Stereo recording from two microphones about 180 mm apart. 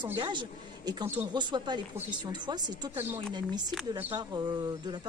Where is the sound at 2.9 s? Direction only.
10° right (ahead or behind).